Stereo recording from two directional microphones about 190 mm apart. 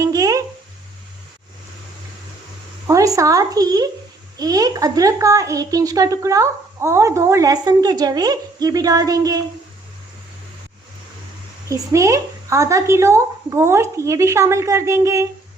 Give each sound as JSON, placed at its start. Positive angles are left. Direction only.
{"t": 0.0, "sound": "a sound", "side_deg": -20}
{"t": 2.8, "sound": "a woman's voice", "side_deg": -15}
{"t": 11.7, "sound": "a woman's voice", "side_deg": -15}